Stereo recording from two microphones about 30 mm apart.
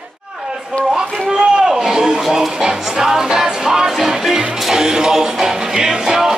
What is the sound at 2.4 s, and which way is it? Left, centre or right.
Music, centre.